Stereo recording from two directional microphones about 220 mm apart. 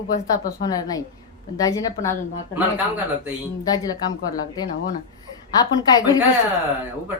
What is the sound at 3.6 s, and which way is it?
A woman's voice, 15° left (ahead or behind).